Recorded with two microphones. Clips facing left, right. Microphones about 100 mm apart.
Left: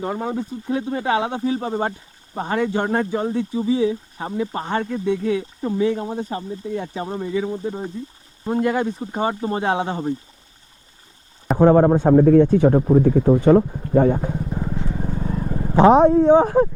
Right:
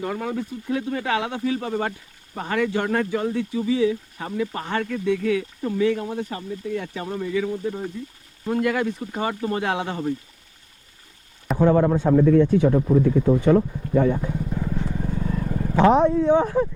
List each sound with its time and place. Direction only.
0.0 s speech: 25° left (ahead or behind)
11.5 s speech: 40° left (ahead or behind)
14.5 s vehicle: 20° left (ahead or behind)
16.3 s speech: 40° left (ahead or behind)